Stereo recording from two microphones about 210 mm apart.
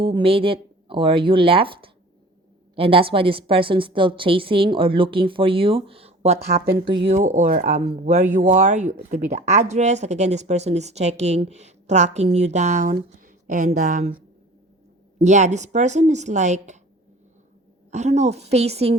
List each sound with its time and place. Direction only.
0.0 s a woman's voice: 25° right (ahead or behind)
15.2 s speech: 35° right (ahead or behind)
17.9 s speech: 30° right (ahead or behind)